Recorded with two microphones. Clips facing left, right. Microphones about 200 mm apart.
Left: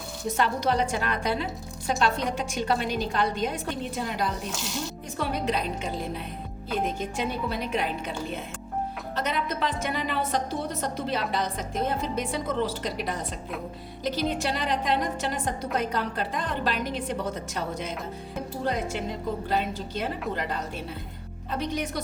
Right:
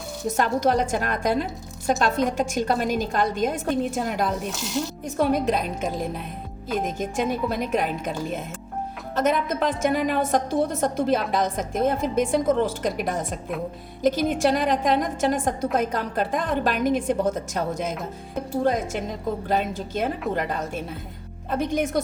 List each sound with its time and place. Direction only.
0.3 s a woman's voice: 45° right (ahead or behind)
9.1 s a woman's voice: 50° right (ahead or behind)